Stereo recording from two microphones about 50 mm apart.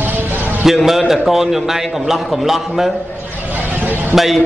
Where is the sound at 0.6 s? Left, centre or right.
Centre.